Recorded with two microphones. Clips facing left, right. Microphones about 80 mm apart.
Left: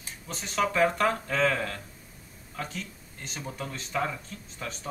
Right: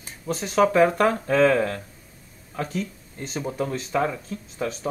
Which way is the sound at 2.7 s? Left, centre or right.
Right.